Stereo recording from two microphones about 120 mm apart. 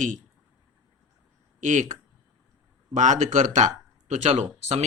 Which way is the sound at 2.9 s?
90° right.